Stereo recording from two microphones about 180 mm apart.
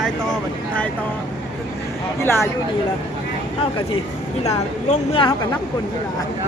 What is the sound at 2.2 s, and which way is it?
Speech, 15° left (ahead or behind).